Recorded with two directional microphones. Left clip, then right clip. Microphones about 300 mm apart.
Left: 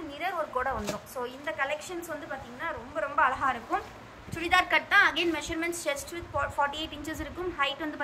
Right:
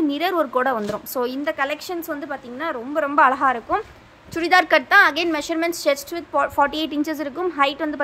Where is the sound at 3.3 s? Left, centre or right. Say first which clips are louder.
Right 9 dB; centre.